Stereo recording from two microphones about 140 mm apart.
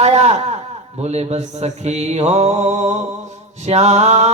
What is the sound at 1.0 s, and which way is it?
Speech, 50° right (ahead or behind).